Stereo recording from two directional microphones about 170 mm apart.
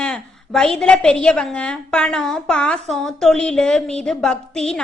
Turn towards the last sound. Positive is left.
turn(degrees=5)  # may be behind; listen again after turning